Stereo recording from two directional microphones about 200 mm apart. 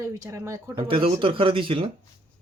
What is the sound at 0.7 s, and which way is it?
Speech, 25° right (ahead or behind).